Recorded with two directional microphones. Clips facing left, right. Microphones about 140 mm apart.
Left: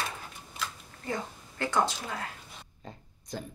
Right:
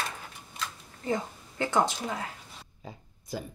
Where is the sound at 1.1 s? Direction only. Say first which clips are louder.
Right 4 dB; 20° right (ahead or behind).